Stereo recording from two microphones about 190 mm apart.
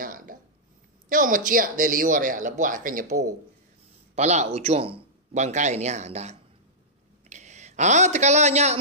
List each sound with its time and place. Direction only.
0.0 s a sound: 45° right (ahead or behind)
1.0 s speech: 45° right (ahead or behind)
4.1 s a man's voice: 35° right (ahead or behind)